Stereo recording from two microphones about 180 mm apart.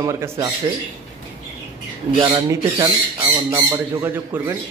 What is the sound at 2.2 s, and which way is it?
Speech, 15° right (ahead or behind).